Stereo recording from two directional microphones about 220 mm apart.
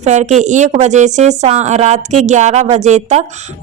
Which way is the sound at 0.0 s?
30° right (ahead or behind).